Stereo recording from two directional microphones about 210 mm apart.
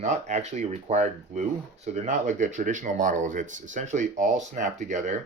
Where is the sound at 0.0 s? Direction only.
35° right (ahead or behind).